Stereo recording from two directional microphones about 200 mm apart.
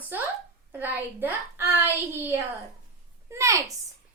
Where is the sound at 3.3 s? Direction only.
15° right (ahead or behind).